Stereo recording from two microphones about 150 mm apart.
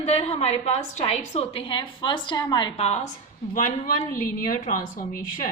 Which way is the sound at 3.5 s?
60° left (ahead or behind).